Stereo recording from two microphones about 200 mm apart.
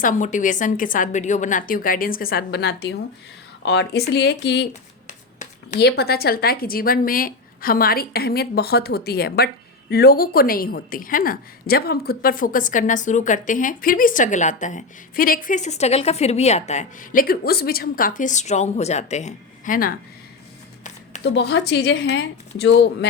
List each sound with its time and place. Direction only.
0.0 s speech: 40° left (ahead or behind); by 4.6 s 60° left (ahead or behind)
5.0 s a sound: 40° left (ahead or behind)
5.8 s a woman's voice: 50° left (ahead or behind)
21.2 s speech: 60° left (ahead or behind)